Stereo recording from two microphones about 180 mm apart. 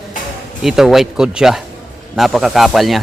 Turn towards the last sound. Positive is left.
turn(degrees=0)  # may be behind; listen again after turning